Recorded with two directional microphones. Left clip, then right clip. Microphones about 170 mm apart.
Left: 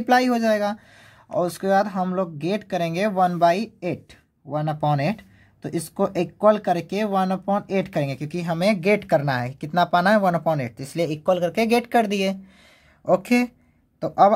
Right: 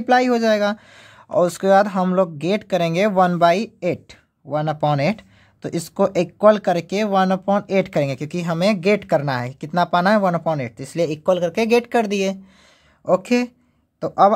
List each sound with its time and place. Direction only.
0.0 s speech: 25° right (ahead or behind)